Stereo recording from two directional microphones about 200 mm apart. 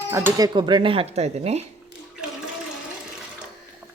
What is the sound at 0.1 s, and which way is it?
Speech, 10° right (ahead or behind).